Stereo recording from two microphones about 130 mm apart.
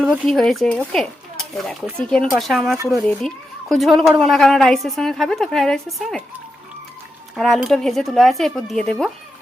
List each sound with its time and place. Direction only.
0.0 s a woman's voice: centre (ahead or behind)
0.9 s a sound: 5° left (ahead or behind)
2.0 s a woman's voice: 5° left (ahead or behind)
2.7 s speech: 20° right (ahead or behind)
3.1 s a child's voice: 5° left (ahead or behind)
7.3 s a woman's voice: centre (ahead or behind)